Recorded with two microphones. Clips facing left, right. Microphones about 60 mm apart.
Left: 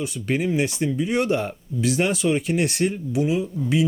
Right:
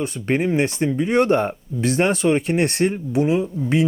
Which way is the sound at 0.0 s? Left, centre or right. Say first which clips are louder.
Right 3 dB; right.